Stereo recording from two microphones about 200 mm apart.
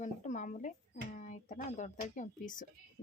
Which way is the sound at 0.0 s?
40° left (ahead or behind).